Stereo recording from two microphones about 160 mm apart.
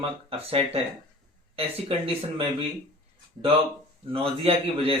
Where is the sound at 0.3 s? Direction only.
35° right (ahead or behind).